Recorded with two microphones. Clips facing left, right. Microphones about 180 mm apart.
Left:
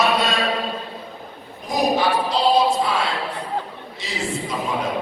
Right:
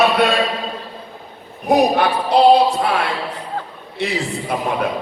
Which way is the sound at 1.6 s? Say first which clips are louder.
Right 5 dB; 65° right (ahead or behind).